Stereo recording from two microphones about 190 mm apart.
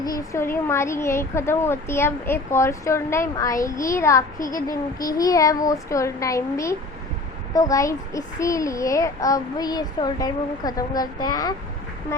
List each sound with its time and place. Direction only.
0.0 s a child's voice: 15° left (ahead or behind)